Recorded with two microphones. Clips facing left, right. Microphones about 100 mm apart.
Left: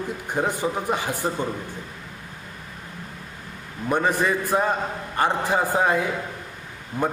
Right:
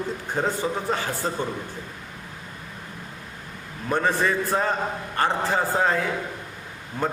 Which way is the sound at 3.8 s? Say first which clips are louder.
Left 1 dB; 15° left (ahead or behind).